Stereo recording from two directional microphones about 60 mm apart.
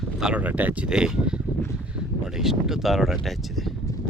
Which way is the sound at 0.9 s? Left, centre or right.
Centre.